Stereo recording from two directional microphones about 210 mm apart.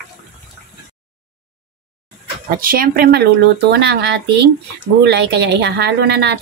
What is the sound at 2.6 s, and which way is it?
Speech, 45° right (ahead or behind).